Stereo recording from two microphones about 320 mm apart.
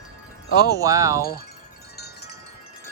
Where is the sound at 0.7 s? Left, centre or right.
Centre.